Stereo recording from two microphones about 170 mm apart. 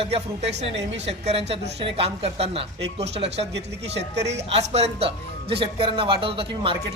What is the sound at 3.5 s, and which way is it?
Speech, 90° right.